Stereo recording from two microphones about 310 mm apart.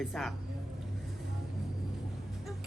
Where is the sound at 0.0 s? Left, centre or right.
Centre.